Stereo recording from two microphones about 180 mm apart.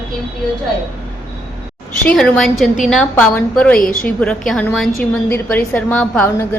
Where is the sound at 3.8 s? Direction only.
50° left (ahead or behind).